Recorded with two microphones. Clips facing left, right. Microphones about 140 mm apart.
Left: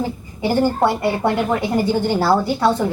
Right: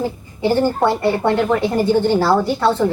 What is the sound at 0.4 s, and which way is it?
A woman's voice, 10° left (ahead or behind).